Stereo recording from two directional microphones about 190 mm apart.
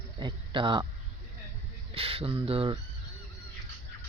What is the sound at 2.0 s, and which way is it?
Speech, 30° right (ahead or behind).